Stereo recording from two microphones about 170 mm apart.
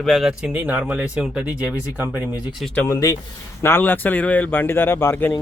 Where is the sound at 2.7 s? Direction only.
20° left (ahead or behind).